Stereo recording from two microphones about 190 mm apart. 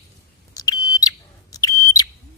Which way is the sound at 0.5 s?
20° left (ahead or behind).